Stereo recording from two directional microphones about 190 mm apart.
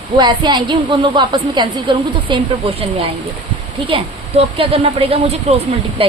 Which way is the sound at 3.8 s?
30° right (ahead or behind).